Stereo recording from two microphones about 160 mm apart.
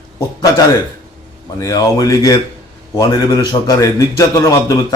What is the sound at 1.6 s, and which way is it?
A man's voice, 25° left (ahead or behind).